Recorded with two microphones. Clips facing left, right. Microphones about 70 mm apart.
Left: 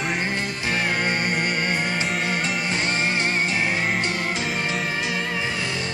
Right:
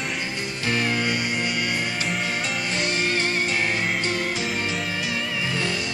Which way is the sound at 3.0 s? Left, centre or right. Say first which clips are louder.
Left 1 dB; left.